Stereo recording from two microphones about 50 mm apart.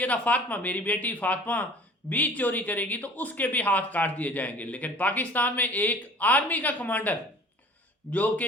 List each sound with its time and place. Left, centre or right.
0.0 s speech: left